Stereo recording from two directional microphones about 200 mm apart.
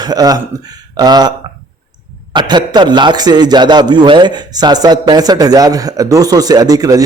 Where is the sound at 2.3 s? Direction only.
20° right (ahead or behind).